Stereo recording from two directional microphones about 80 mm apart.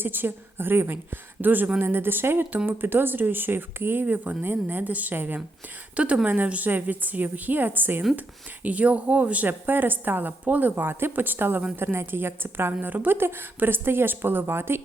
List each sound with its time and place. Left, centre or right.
0.0 s speech: right